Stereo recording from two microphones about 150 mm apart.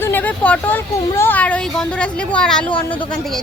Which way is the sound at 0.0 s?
10° left (ahead or behind).